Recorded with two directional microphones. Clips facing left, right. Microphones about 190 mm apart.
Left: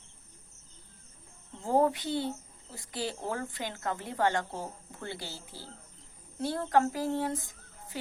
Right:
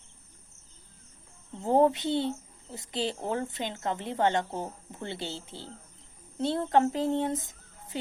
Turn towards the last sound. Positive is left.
turn(degrees=-20)  # may be behind; listen again after turning